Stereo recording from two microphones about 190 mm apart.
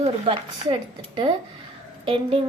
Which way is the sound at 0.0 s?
30° right (ahead or behind).